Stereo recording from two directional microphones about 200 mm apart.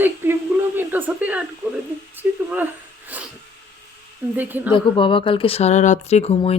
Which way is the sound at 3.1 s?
10° right (ahead or behind).